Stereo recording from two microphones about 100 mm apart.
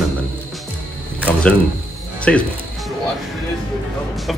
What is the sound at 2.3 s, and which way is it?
Speech, 10° left (ahead or behind).